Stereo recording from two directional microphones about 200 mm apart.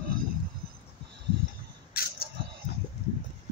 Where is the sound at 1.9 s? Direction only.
50° left (ahead or behind).